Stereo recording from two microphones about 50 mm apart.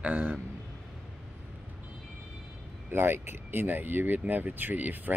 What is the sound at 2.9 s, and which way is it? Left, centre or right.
Speech, right.